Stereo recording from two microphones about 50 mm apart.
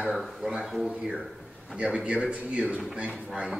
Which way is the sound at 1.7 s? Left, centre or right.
Right.